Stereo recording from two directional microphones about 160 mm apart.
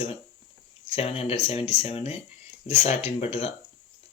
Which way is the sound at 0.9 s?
40° left (ahead or behind).